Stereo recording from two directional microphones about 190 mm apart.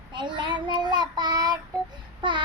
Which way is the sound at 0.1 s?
25° right (ahead or behind).